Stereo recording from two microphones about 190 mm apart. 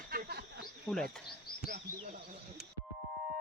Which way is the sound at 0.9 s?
Centre (ahead or behind).